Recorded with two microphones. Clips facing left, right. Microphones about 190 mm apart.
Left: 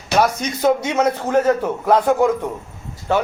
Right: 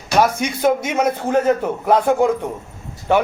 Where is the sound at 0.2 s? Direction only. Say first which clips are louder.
Right 1 dB; 10° right (ahead or behind).